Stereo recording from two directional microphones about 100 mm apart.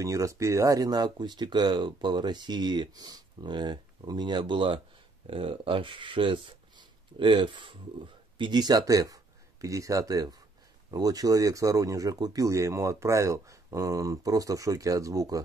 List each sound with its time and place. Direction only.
0.0 s speech: 30° right (ahead or behind)